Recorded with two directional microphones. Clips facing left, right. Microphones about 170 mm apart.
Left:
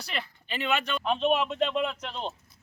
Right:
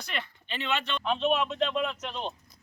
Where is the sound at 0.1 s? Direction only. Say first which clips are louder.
Left 1 dB; 10° left (ahead or behind).